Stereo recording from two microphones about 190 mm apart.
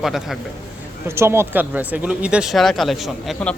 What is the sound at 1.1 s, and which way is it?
A man's voice, 15° right (ahead or behind).